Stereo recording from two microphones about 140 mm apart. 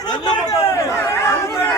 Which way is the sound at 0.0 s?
30° left (ahead or behind).